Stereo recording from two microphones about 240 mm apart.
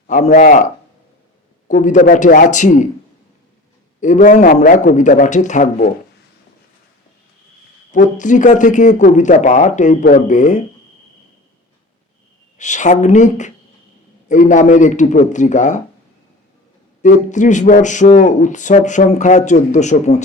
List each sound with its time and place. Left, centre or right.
0.1 s speech: left
4.0 s speech: left
7.9 s speech: left
12.5 s speech: left
17.0 s speech: left